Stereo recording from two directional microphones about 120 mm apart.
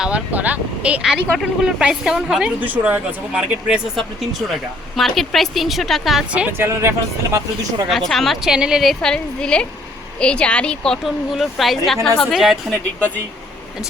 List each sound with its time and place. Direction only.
0.0 s a woman's voice: 10° right (ahead or behind)
6.7 s speech: 25° right (ahead or behind)
7.9 s a woman's voice: centre (ahead or behind)